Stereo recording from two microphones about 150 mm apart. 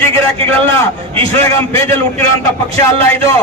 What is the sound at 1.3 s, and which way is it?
Speech, 20° left (ahead or behind).